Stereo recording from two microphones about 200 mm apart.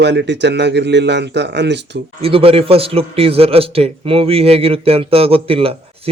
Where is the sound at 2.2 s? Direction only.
30° right (ahead or behind).